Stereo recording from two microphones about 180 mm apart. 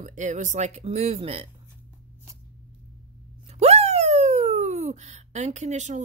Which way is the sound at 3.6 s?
35° right (ahead or behind).